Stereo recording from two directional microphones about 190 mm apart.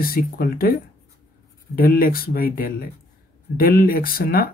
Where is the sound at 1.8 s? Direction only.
50° left (ahead or behind).